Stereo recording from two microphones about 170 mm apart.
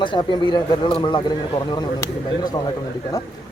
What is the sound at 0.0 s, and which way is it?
Speech, 30° left (ahead or behind).